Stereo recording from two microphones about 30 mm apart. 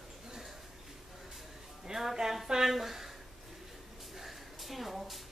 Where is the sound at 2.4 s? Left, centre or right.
Centre.